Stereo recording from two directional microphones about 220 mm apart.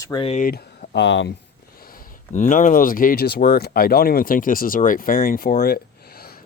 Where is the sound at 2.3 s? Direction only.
35° left (ahead or behind).